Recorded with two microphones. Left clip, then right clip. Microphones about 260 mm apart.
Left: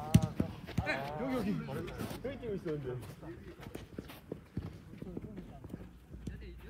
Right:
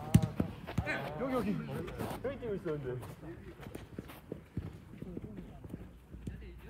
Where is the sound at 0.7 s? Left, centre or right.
Right.